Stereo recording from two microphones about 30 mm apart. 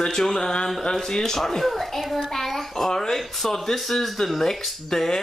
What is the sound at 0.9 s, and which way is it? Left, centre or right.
Speech, centre.